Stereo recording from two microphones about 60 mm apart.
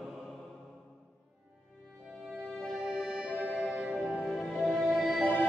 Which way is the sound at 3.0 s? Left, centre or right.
Centre.